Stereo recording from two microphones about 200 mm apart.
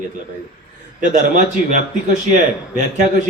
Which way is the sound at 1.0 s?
40° right (ahead or behind).